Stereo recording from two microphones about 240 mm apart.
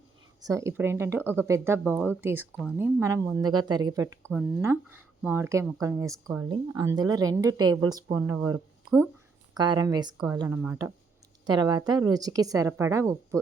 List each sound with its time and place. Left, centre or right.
0.4 s a woman's voice: centre
9.6 s a woman's voice: centre